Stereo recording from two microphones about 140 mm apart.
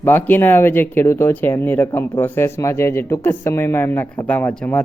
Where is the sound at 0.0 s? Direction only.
15° left (ahead or behind).